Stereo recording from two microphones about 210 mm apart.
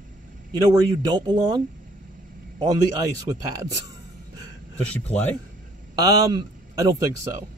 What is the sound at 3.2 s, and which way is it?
Speech, 15° right (ahead or behind).